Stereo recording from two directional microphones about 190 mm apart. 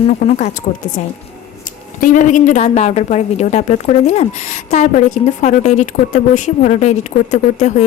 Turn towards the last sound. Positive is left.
turn(degrees=40)  # may be behind; listen again after turning